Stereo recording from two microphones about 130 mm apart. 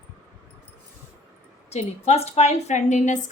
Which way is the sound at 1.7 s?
55° left (ahead or behind).